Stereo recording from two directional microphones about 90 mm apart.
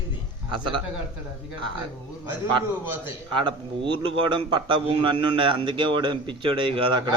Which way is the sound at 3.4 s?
65° right (ahead or behind).